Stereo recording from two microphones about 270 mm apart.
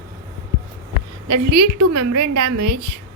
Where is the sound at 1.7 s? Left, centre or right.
Right.